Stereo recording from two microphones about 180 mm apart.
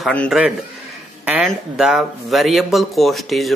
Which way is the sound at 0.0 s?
5° left (ahead or behind).